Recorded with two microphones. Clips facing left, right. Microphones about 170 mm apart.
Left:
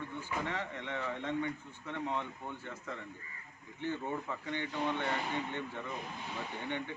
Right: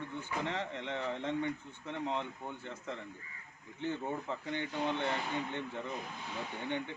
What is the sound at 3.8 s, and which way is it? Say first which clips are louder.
Speech: even; 25° right (ahead or behind).